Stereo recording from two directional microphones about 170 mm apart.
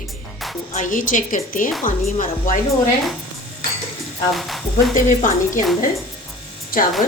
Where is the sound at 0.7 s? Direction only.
50° left (ahead or behind).